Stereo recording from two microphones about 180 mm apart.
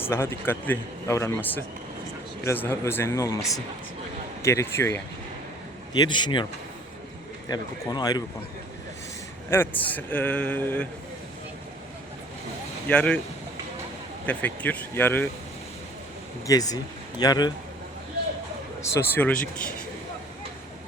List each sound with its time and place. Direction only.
0.0 s a man's voice: 15° left (ahead or behind)
5.9 s speech: 25° left (ahead or behind)
9.5 s a man's voice: 10° left (ahead or behind)
12.9 s speech: 5° left (ahead or behind)
14.3 s a man's voice: 10° left (ahead or behind)
16.5 s speech: 20° left (ahead or behind)
18.8 s a man's voice: 15° left (ahead or behind)